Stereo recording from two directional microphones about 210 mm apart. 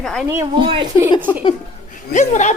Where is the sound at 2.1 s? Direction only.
35° left (ahead or behind).